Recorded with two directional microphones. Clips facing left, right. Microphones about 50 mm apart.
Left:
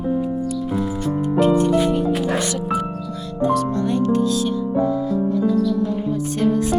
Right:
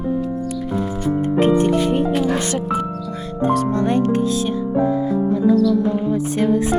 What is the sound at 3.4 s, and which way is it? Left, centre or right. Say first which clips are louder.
Speech: right 2 dB; right.